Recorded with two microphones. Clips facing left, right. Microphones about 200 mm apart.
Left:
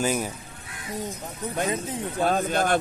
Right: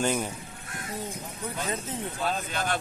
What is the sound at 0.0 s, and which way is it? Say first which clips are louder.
Speech: left 2 dB; 5° left (ahead or behind).